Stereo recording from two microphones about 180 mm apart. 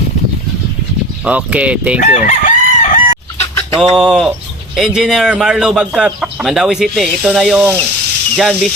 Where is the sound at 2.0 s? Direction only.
45° left (ahead or behind).